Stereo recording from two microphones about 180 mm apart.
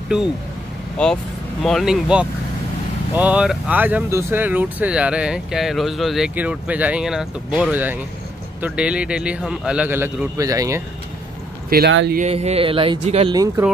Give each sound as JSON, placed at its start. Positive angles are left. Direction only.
{"t": 1.0, "sound": "speech", "side_deg": 5}
{"t": 11.7, "sound": "speech", "side_deg": -70}
{"t": 12.2, "sound": "speech", "side_deg": -35}
{"t": 13.3, "sound": "speech", "side_deg": -20}